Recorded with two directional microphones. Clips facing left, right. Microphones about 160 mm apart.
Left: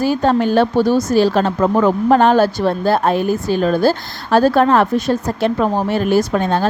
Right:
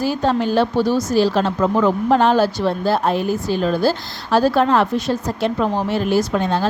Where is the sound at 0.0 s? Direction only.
50° left (ahead or behind).